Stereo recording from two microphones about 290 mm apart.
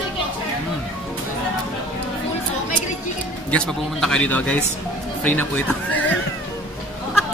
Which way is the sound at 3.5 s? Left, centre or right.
Centre.